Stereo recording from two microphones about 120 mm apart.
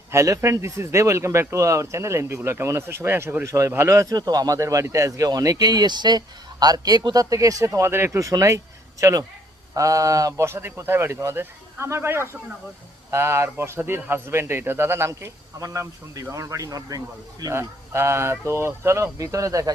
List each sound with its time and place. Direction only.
0.1 s speech: 25° right (ahead or behind)